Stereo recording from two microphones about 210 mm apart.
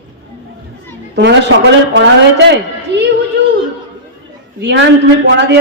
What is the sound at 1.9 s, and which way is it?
Speech, 55° right (ahead or behind).